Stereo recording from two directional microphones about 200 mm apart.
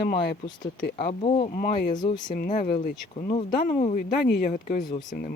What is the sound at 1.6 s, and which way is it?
Speech, 45° left (ahead or behind).